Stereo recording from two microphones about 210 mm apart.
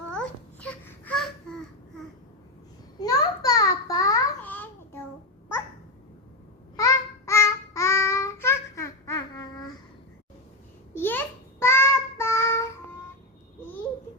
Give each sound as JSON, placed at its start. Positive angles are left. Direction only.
{"t": 0.1, "sound": "babbling", "side_deg": 5}
{"t": 3.0, "sound": "a sound", "side_deg": 15}
{"t": 6.7, "sound": "child singing", "side_deg": 15}
{"t": 10.9, "sound": "babbling", "side_deg": 10}
{"t": 11.6, "sound": "child singing", "side_deg": 10}